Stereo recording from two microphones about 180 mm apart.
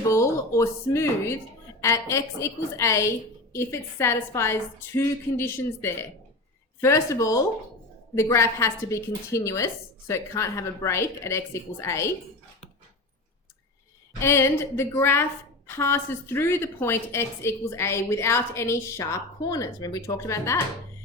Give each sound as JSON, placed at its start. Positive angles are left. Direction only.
{"t": 0.1, "sound": "a woman's voice", "side_deg": 15}
{"t": 14.2, "sound": "a woman's voice", "side_deg": 15}